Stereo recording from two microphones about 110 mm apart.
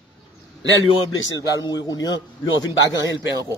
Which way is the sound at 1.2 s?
30° left (ahead or behind).